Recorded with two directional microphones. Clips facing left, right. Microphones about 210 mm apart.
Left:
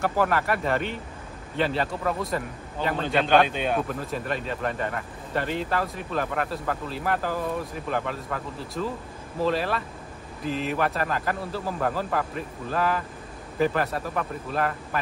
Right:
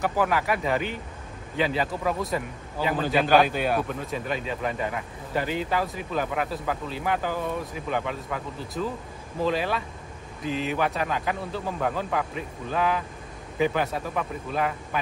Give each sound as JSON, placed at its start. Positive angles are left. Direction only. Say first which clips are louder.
{"t": 0.0, "sound": "a man's voice", "louder": "left 1 dB", "side_deg": 0}